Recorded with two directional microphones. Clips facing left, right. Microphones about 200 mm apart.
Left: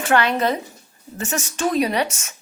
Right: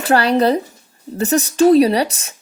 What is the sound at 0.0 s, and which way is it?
Speech, 35° right (ahead or behind).